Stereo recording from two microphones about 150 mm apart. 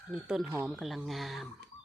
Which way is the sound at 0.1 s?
5° right (ahead or behind).